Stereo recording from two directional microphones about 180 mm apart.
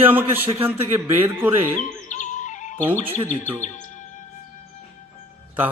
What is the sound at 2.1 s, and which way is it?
Music, 45° left (ahead or behind).